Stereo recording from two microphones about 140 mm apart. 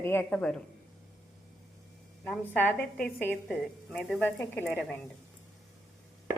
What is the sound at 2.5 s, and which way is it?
A woman's voice, 15° left (ahead or behind).